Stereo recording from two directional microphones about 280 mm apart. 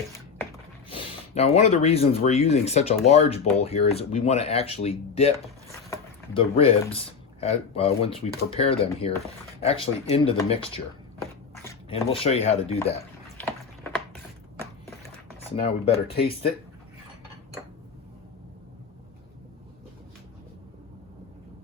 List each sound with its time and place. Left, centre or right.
0.9 s speech: left
11.9 s speech: centre
15.6 s speech: centre